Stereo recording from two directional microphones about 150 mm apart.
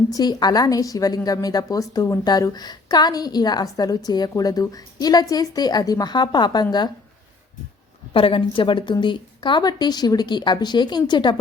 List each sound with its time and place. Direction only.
0.1 s a woman's voice: 25° left (ahead or behind)
8.1 s a woman's voice: 35° left (ahead or behind)